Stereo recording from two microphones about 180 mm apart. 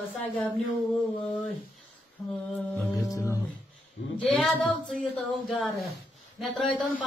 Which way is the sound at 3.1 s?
15° left (ahead or behind).